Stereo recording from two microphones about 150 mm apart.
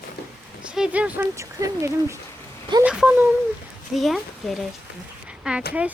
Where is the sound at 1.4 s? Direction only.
20° right (ahead or behind).